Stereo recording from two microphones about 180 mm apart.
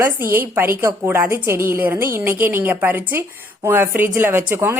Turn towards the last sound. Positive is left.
turn(degrees=-10)  # may be behind; listen again after turning